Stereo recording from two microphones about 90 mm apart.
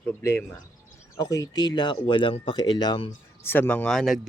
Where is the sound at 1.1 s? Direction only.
40° left (ahead or behind); by 3.1 s 70° left (ahead or behind).